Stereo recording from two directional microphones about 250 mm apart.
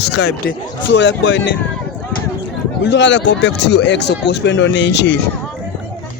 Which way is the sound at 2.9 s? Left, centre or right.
Left.